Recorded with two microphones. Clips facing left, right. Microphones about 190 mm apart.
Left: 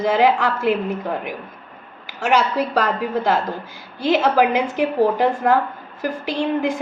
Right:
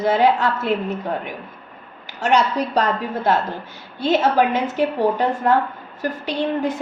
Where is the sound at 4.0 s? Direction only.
10° left (ahead or behind).